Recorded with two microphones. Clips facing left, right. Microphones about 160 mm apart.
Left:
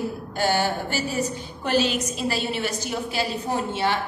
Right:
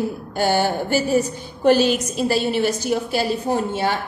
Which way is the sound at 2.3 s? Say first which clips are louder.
Right 10 dB; 45° right (ahead or behind).